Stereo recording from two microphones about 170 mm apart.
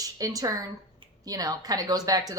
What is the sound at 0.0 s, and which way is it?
A woman's voice, 20° right (ahead or behind).